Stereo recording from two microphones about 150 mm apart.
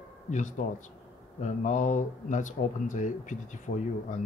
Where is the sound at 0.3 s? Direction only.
55° left (ahead or behind).